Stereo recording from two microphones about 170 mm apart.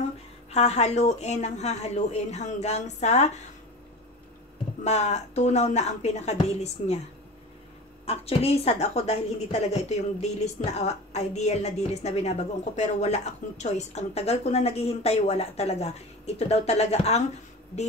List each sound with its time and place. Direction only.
0.5 s a woman's voice: 40° left (ahead or behind)
4.8 s a woman's voice: 40° left (ahead or behind)
8.0 s a woman's voice: 35° left (ahead or behind)